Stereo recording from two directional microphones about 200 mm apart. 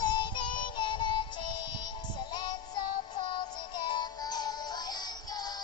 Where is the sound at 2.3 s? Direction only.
20° left (ahead or behind).